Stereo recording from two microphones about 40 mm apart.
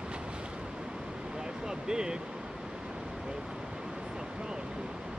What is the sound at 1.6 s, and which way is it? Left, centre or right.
Speech, centre.